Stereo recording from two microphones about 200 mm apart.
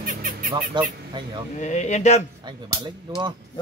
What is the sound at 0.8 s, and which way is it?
Speech, 20° right (ahead or behind).